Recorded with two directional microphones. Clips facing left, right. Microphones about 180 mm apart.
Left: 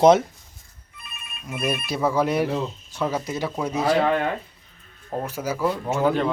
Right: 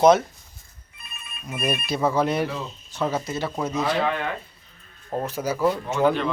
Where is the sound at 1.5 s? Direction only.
5° left (ahead or behind).